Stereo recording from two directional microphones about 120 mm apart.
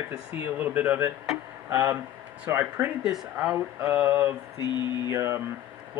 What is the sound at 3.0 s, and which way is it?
Speech, 5° right (ahead or behind).